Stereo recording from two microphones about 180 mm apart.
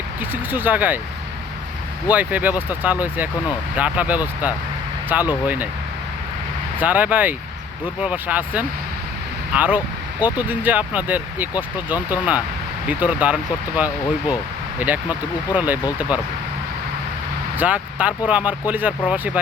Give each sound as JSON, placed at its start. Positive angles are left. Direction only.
{"t": 0.2, "sound": "speech", "side_deg": -10}
{"t": 2.0, "sound": "speech", "side_deg": -10}
{"t": 6.7, "sound": "speech", "side_deg": -10}
{"t": 17.6, "sound": "speech", "side_deg": -10}